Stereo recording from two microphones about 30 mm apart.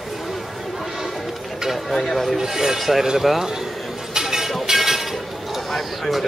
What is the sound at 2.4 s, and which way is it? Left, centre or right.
Speech, centre.